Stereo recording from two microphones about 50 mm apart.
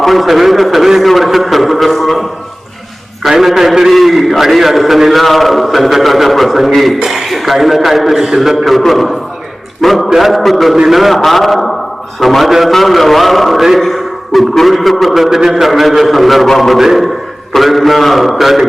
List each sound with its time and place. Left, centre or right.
0.0 s a man's voice: centre
3.2 s a man's voice: centre